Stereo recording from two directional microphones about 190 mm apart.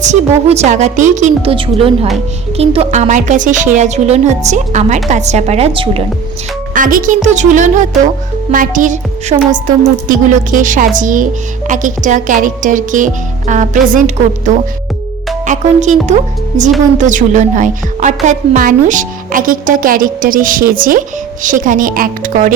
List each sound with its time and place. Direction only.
0.0 s speech: 35° right (ahead or behind)
6.7 s a woman's voice: 45° right (ahead or behind)
15.4 s a woman's voice: 40° right (ahead or behind)